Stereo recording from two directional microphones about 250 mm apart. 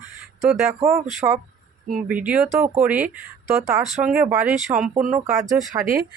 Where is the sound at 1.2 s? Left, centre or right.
Centre.